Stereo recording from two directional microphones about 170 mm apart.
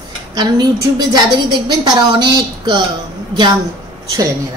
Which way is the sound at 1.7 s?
25° right (ahead or behind).